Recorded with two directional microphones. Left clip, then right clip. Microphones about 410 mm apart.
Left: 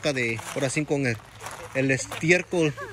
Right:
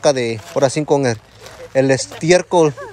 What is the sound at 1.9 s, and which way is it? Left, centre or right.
Speech, centre.